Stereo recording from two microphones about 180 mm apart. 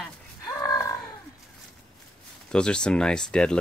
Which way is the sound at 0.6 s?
20° left (ahead or behind).